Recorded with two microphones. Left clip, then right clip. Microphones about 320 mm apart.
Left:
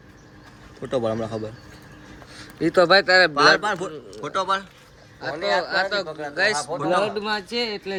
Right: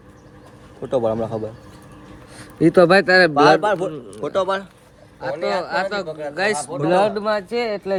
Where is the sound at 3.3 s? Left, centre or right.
Centre.